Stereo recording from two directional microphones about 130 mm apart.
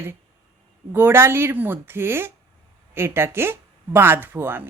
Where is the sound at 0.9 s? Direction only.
15° right (ahead or behind).